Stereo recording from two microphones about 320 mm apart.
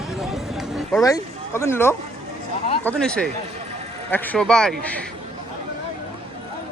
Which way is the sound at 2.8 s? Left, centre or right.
Centre.